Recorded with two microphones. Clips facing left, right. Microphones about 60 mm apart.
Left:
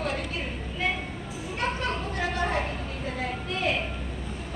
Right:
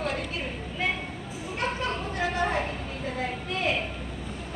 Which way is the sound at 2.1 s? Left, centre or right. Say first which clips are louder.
Right 2 dB; right.